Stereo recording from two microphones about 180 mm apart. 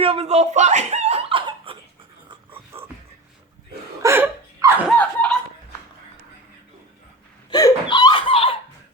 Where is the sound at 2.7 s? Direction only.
35° right (ahead or behind).